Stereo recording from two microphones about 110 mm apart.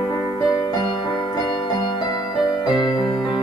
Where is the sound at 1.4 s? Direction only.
45° left (ahead or behind).